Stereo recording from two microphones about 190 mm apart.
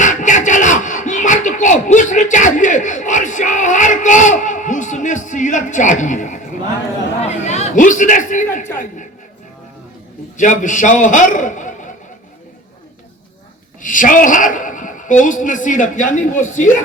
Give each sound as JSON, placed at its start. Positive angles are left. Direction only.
{"t": 0.0, "sound": "a sound", "side_deg": 40}
{"t": 10.3, "sound": "a woman's voice", "side_deg": 40}
{"t": 13.8, "sound": "a woman's voice", "side_deg": 45}